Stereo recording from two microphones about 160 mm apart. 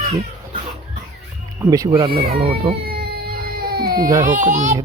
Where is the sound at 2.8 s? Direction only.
75° right (ahead or behind).